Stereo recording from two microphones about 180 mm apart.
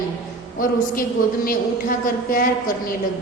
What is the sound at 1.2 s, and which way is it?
Speech, 50° left (ahead or behind).